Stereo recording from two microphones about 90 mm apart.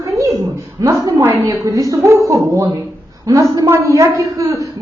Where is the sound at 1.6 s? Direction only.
40° right (ahead or behind).